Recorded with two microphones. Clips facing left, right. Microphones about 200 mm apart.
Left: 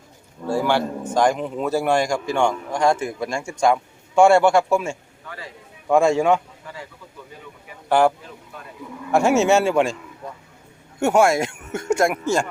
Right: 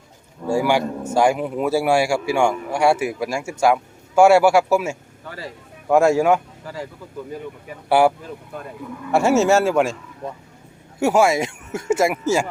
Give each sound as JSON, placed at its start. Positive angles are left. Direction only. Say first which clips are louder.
{"t": 0.4, "sound": "a man's voice", "louder": "right 2 dB", "side_deg": -10}
{"t": 5.3, "sound": "speech", "louder": "right 3 dB", "side_deg": -35}
{"t": 5.9, "sound": "speech", "louder": "right 1 dB", "side_deg": -5}
{"t": 7.9, "sound": "a man's voice", "louder": "right 1 dB", "side_deg": -10}
{"t": 9.1, "sound": "speech", "louder": "right 1 dB", "side_deg": 0}
{"t": 11.0, "sound": "speech", "louder": "even", "side_deg": 0}